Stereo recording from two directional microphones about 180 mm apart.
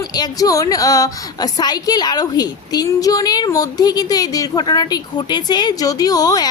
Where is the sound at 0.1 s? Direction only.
20° left (ahead or behind).